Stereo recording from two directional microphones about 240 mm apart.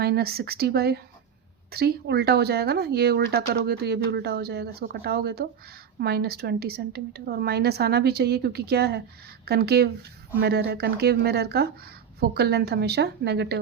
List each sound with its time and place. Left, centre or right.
0.0 s speech: right